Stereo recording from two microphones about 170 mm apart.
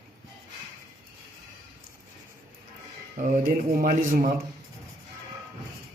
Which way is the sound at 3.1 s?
50° right (ahead or behind).